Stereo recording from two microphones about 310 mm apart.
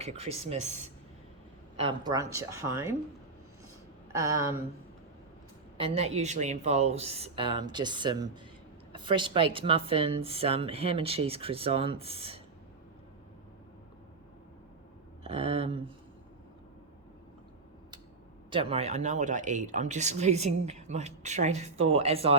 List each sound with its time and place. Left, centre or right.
0.0 s speech: centre
5.7 s speech: centre
15.2 s speech: centre
18.5 s speech: centre